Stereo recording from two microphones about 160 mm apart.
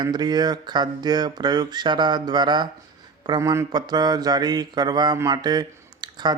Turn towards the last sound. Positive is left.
turn(degrees=-25)  # may be behind; listen again after turning